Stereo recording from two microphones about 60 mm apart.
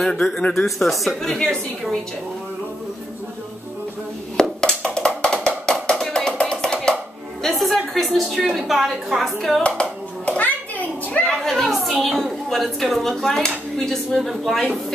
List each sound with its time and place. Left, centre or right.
0.0 s speech: centre
4.4 s music: centre
7.4 s a sound: centre
8.5 s speech: centre
9.6 s hands: centre
11.2 s a woman's voice: centre